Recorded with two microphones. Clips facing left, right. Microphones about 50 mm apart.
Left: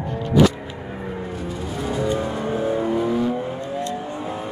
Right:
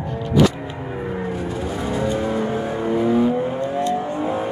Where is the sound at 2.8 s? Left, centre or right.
Centre; by 4.5 s right.